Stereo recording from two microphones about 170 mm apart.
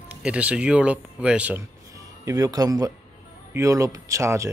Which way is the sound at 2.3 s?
20° right (ahead or behind).